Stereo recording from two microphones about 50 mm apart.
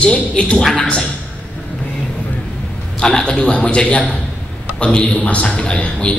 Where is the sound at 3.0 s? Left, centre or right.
Centre.